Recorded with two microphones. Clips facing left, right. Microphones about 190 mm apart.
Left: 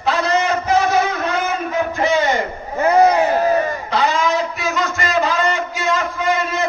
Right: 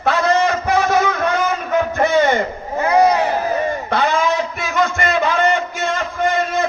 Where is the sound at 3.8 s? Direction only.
55° right (ahead or behind).